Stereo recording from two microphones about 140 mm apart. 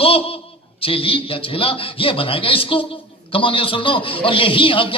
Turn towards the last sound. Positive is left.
turn(degrees=40)  # may be behind; listen again after turning